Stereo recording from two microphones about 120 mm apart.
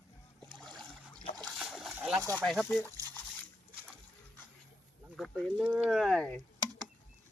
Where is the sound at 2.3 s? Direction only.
5° left (ahead or behind).